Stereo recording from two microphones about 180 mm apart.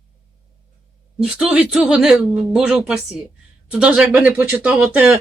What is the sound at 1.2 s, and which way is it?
Speech, 5° right (ahead or behind).